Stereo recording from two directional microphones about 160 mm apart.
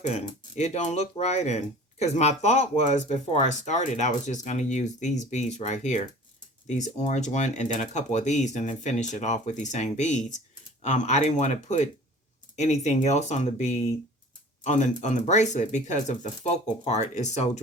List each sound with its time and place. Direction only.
0.0 s speech: 45° left (ahead or behind)